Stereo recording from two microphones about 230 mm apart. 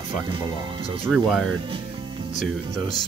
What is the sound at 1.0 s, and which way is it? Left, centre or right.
Speech, centre.